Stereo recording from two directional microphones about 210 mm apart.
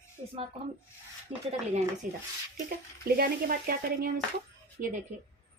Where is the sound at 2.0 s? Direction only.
40° right (ahead or behind).